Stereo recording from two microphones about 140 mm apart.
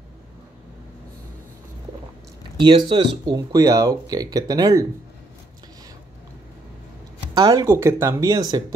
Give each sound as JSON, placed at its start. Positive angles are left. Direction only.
{"t": 2.6, "sound": "speech", "side_deg": -35}
{"t": 7.3, "sound": "speech", "side_deg": -30}